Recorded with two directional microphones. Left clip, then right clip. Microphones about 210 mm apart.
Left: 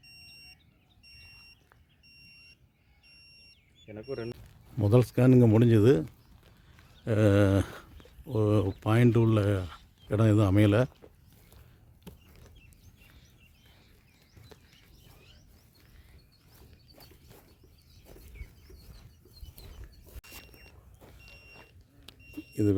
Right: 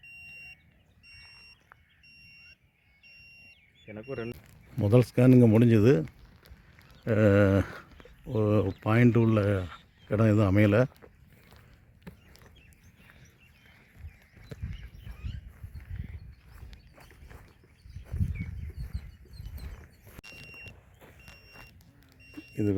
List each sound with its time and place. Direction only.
3.8 s speech: 35° right (ahead or behind)
4.8 s speech: 5° right (ahead or behind)
12.1 s chicken: 20° right (ahead or behind)
22.3 s smoke detector: centre (ahead or behind)